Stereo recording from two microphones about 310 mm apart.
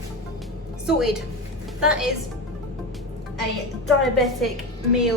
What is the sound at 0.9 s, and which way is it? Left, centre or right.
Speech, centre.